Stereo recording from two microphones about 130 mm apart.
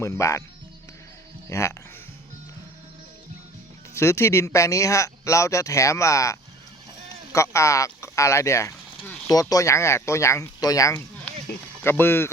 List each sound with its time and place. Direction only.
0.0 s speech: 25° left (ahead or behind)
1.5 s speech: 20° left (ahead or behind)
3.9 s speech: 20° left (ahead or behind)
7.3 s speech: 25° left (ahead or behind)